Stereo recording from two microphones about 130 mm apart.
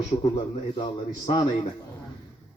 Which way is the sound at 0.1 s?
50° left (ahead or behind).